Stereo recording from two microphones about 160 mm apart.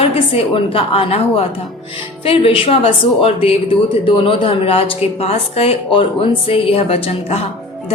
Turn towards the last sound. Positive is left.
turn(degrees=40)  # may be behind; listen again after turning